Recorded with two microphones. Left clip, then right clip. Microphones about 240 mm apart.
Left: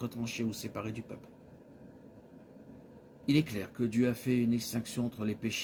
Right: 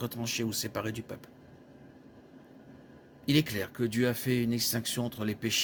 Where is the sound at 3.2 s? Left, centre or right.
Right.